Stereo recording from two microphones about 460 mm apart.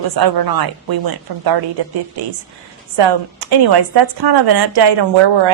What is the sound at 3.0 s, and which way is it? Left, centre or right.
Speech, right.